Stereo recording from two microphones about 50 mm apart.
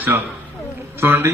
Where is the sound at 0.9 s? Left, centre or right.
Right.